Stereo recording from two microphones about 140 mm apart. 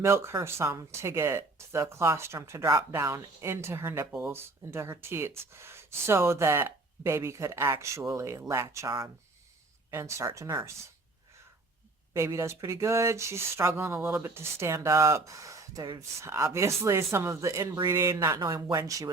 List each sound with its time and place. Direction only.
0.0 s speech: 20° right (ahead or behind)
9.9 s speech: 20° right (ahead or behind)
12.1 s speech: 20° right (ahead or behind)